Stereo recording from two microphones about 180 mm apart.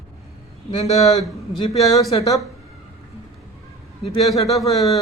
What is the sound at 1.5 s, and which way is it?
Speech, 30° left (ahead or behind).